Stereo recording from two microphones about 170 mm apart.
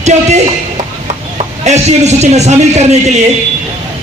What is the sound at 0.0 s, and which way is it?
Speech, 40° right (ahead or behind).